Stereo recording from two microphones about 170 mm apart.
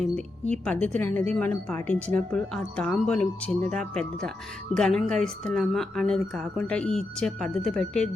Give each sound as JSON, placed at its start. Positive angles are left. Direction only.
{"t": 0.0, "sound": "speech", "side_deg": 5}